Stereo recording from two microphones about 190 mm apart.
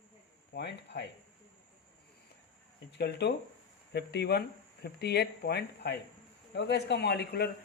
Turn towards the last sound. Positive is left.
turn(degrees=55)  # may be behind; listen again after turning